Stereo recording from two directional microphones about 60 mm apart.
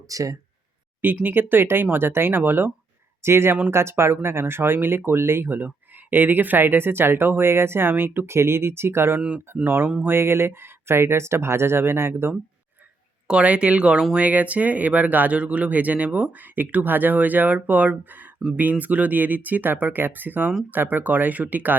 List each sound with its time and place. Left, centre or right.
0.1 s speech: right
1.0 s speech: right
10.1 s speech: right
13.2 s speech: centre